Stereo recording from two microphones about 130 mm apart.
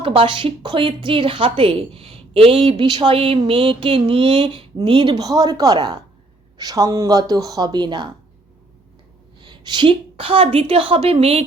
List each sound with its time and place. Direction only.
0.0 s a woman's voice: 45° right (ahead or behind)
9.4 s a woman's voice: 40° right (ahead or behind)